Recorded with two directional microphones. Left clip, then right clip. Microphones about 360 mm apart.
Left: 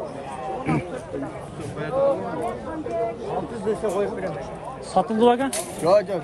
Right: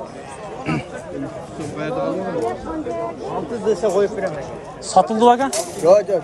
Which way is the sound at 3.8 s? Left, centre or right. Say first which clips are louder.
Right 6 dB; right.